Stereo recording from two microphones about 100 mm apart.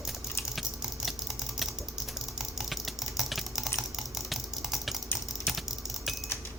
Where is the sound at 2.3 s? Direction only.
Centre (ahead or behind).